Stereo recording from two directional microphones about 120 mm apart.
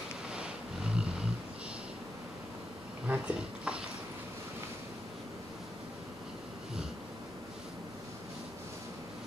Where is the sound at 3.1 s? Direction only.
10° right (ahead or behind).